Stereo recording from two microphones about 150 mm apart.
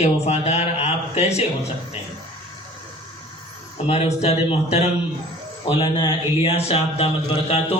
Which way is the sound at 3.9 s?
45° left (ahead or behind).